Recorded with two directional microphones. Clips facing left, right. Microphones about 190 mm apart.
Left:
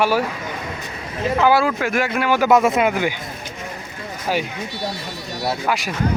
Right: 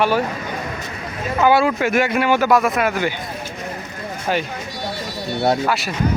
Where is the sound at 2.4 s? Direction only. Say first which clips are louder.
Left 1 dB; 20° left (ahead or behind).